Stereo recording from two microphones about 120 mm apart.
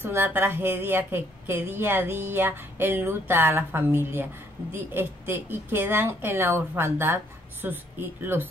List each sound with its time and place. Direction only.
0.0 s a woman's voice: 15° right (ahead or behind)